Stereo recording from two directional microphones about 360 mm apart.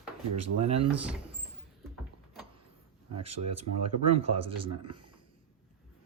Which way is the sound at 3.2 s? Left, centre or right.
Right.